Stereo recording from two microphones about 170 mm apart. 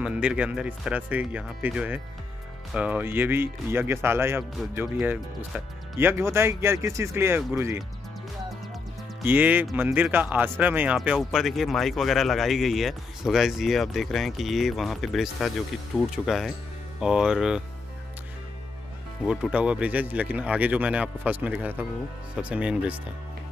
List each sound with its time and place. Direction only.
0.0 s speech: 5° right (ahead or behind)
9.2 s speech: 10° right (ahead or behind)
19.2 s speech: 5° right (ahead or behind)